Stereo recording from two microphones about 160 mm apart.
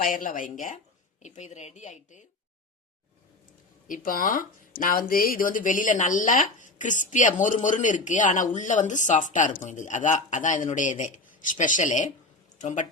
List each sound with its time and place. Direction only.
0.0 s speech: 55° left (ahead or behind)
3.8 s speech: 60° left (ahead or behind)